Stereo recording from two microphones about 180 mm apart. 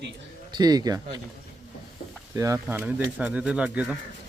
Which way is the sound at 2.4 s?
15° right (ahead or behind).